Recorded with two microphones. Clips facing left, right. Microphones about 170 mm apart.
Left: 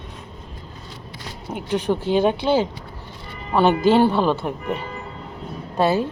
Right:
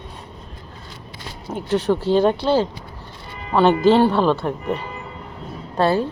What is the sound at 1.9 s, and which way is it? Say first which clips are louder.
Speech: right 2 dB; 15° left (ahead or behind).